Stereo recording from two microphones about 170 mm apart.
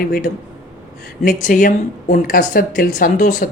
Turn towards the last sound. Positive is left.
turn(degrees=55)  # may be behind; listen again after turning